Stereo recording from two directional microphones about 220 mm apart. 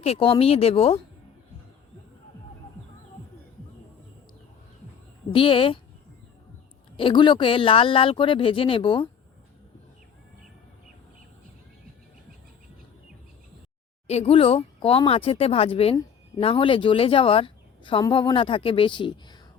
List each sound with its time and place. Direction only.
0.0 s speech: 25° left (ahead or behind)
5.3 s speech: 25° left (ahead or behind)
6.9 s speech: 20° left (ahead or behind)
14.1 s speech: 30° left (ahead or behind)